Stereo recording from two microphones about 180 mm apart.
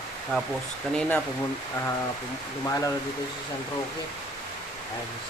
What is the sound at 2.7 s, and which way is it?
Speech, 15° left (ahead or behind).